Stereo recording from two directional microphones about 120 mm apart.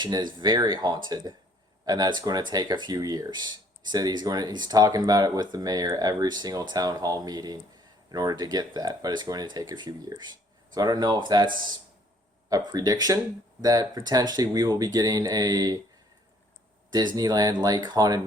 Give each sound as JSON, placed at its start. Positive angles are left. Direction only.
{"t": 0.0, "sound": "speech", "side_deg": -40}
{"t": 17.2, "sound": "speech", "side_deg": -30}